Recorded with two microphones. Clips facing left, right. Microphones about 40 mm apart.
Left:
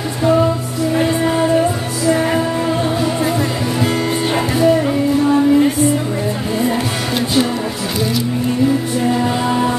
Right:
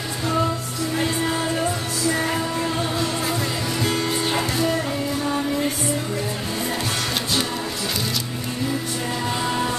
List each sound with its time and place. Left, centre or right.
0.2 s music: centre
4.6 s music: centre
9.1 s music: centre